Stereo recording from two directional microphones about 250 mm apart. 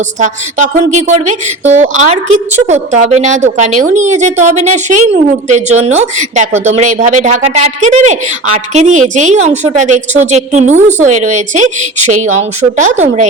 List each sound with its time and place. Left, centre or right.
0.2 s a woman's voice: right